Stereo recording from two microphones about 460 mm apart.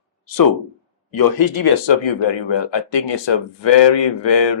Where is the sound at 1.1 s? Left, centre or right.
Left.